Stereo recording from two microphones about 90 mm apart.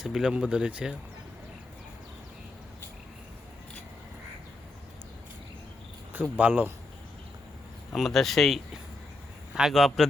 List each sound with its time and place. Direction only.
0.0 s speech: 5° right (ahead or behind)
6.3 s speech: 20° right (ahead or behind)
7.9 s speech: centre (ahead or behind)